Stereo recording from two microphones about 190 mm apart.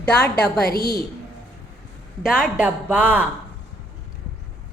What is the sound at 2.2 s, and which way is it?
Speech, 5° right (ahead or behind).